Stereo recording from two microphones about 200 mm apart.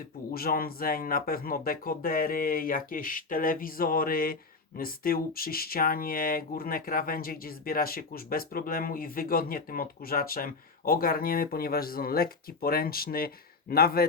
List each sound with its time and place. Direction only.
0.3 s speech: 50° left (ahead or behind)